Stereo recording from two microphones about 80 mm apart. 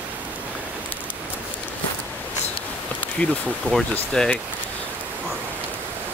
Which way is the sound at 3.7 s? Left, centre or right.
Centre.